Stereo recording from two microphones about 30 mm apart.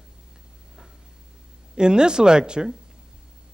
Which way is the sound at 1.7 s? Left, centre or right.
Right.